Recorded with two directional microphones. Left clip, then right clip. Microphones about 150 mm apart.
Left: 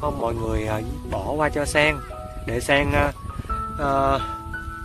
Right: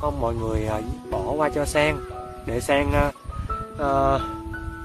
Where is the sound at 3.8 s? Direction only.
20° right (ahead or behind).